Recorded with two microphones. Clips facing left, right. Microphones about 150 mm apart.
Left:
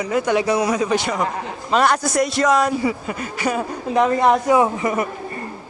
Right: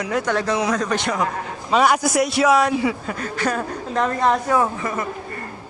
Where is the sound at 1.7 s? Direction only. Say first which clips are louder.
Even; 5° right (ahead or behind); by 5.4 s 15° left (ahead or behind).